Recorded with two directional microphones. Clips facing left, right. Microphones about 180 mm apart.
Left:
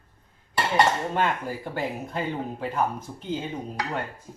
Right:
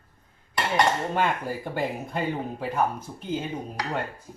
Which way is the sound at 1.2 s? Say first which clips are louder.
Even; 15° right (ahead or behind).